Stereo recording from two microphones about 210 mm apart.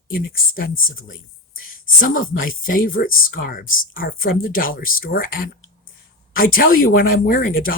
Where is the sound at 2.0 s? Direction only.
40° left (ahead or behind).